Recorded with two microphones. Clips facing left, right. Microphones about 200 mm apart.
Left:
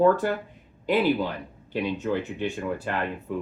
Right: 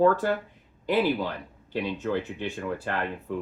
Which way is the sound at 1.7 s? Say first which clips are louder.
Left 1 dB; 15° left (ahead or behind).